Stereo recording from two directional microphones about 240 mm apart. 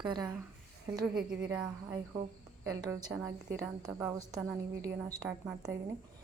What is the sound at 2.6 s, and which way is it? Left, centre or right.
A woman's voice, centre.